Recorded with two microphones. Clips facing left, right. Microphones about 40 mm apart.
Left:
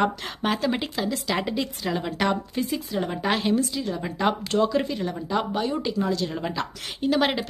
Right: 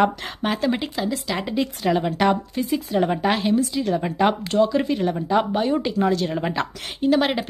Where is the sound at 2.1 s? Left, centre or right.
Centre.